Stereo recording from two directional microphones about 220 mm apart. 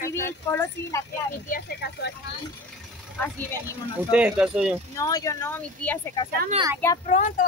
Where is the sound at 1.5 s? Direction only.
45° left (ahead or behind).